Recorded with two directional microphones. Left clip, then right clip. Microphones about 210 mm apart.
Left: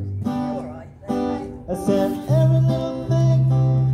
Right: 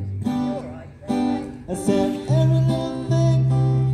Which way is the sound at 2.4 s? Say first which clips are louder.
Left 2 dB; 30° left (ahead or behind).